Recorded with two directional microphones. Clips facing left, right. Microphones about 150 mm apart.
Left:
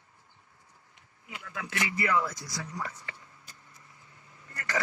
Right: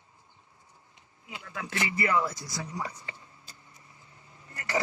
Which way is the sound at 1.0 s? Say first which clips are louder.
Right 1 dB; 20° right (ahead or behind).